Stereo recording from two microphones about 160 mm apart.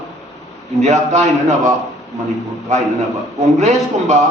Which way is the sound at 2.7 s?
45° right (ahead or behind).